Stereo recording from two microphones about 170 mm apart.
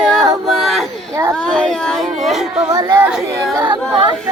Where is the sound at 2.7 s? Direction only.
20° right (ahead or behind).